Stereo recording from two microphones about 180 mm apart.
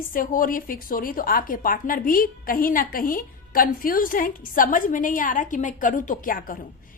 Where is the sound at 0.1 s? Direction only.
50° left (ahead or behind).